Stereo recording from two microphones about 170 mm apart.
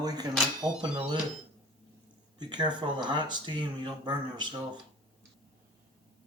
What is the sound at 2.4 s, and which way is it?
Speech, 25° right (ahead or behind).